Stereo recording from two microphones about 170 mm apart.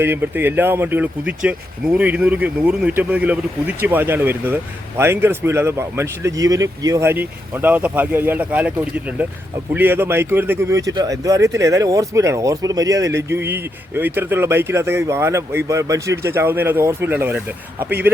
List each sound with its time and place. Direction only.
0.0 s speech: 10° right (ahead or behind)